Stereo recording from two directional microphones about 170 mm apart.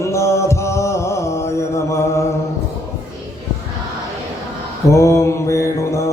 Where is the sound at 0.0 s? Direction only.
15° left (ahead or behind).